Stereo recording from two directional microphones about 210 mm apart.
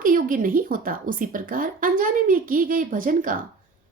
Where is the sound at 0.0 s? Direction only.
40° right (ahead or behind).